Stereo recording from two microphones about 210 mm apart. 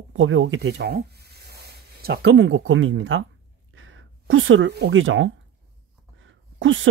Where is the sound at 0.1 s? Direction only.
65° right (ahead or behind).